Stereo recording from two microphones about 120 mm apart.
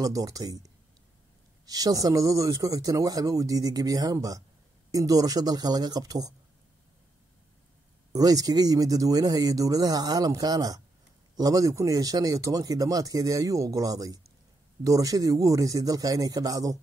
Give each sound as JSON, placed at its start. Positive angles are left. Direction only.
{"t": 0.0, "sound": "speech", "side_deg": -30}
{"t": 1.7, "sound": "speech", "side_deg": -30}
{"t": 8.1, "sound": "speech", "side_deg": -30}